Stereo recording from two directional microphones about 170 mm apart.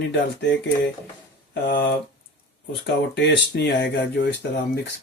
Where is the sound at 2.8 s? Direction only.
85° left.